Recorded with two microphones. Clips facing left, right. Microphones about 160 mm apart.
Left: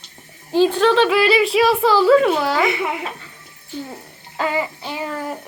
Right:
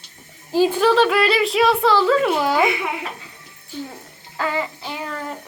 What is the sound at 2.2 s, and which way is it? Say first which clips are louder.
Speech: left 1 dB; 15° right (ahead or behind).